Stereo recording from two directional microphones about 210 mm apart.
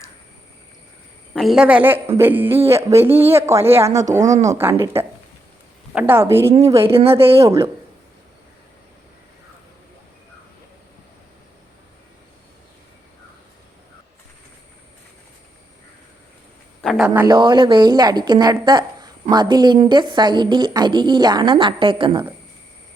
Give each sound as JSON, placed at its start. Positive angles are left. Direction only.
{"t": 1.3, "sound": "a woman's voice", "side_deg": 0}
{"t": 4.2, "sound": "speech", "side_deg": -35}
{"t": 4.5, "sound": "a woman's voice", "side_deg": -10}
{"t": 7.2, "sound": "a woman's voice", "side_deg": -25}
{"t": 7.4, "sound": "a woman's voice", "side_deg": -15}
{"t": 16.8, "sound": "a sound", "side_deg": 0}
{"t": 17.2, "sound": "a woman's voice", "side_deg": -20}